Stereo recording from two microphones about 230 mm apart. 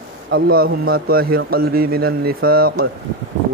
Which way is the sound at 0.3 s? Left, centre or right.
Right.